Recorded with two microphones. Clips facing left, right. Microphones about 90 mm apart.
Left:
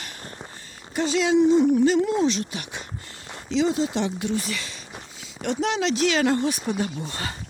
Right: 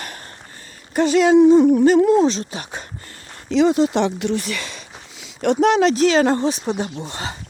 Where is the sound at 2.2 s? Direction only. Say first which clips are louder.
Right 4 dB; 35° right (ahead or behind).